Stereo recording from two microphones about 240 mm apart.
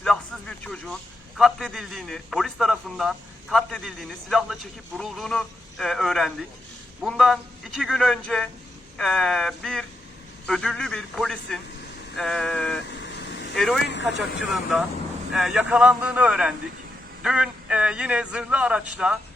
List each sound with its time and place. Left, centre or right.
0.0 s radio: centre
1.4 s a man's voice: centre
12.9 s vehicle: left
13.8 s speech: left
14.5 s a man's voice: centre